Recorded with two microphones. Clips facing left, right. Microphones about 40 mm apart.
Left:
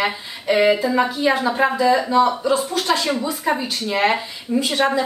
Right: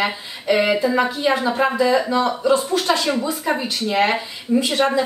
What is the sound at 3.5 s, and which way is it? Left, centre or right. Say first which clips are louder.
Speech: left 2 dB; centre.